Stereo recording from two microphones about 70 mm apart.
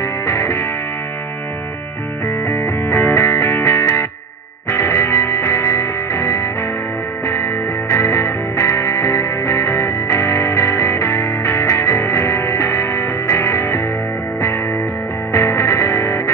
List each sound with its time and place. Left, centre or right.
0.3 s music: left
2.4 s music: left
15.3 s music: left